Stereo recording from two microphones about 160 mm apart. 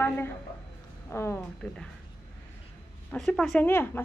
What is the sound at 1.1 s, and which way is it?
Speech, 15° left (ahead or behind).